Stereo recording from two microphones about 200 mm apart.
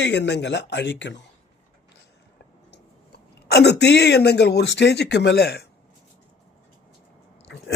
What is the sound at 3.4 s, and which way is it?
Speech, 55° left (ahead or behind).